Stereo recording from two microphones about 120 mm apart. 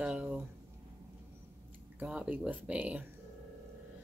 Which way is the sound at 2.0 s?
10° right (ahead or behind).